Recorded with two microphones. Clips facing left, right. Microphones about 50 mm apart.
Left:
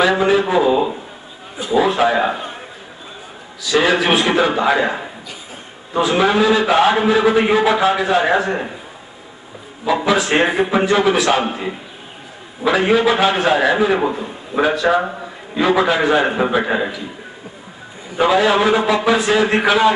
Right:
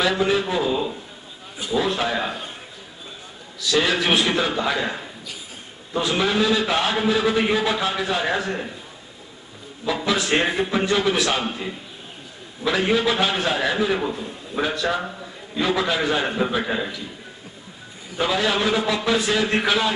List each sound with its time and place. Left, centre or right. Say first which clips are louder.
0.0 s a man's voice: left 6 dB; centre
3.7 s a man's voice: left 5 dB; centre
4.8 s a man's voice: left 7 dB; left
5.9 s a man's voice: left 6 dB; centre
10.0 s a man's voice: left 5 dB; centre
15.0 s a man's voice: left 9 dB; left
18.1 s a man's voice: left 8 dB; centre